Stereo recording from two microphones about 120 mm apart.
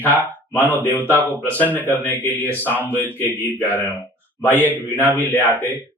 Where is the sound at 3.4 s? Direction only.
15° left (ahead or behind).